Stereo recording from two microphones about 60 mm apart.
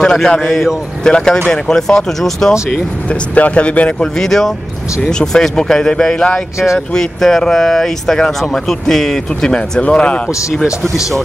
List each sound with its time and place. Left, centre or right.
0.0 s speech: centre
3.1 s speech: left
4.2 s speech: centre